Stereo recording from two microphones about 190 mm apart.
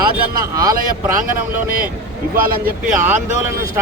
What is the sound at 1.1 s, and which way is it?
Speech, 45° right (ahead or behind).